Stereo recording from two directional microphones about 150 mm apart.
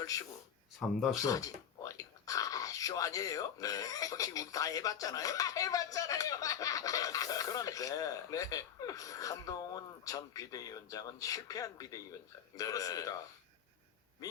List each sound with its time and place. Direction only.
0.0 s speech: 25° left (ahead or behind)